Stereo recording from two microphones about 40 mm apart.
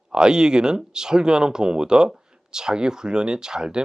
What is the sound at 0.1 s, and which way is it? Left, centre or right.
Speech, right.